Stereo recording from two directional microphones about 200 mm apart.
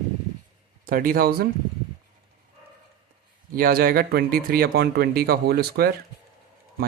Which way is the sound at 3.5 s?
45° right (ahead or behind).